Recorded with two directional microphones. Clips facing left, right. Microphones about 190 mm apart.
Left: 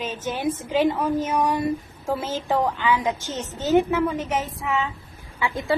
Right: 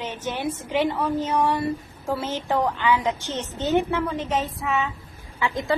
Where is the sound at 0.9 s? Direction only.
15° left (ahead or behind).